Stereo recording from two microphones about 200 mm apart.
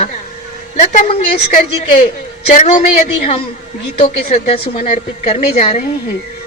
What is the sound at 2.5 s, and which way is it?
A woman's voice, 40° left (ahead or behind).